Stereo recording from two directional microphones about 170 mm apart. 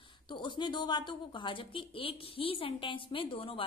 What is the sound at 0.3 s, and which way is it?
A woman's voice, 25° left (ahead or behind).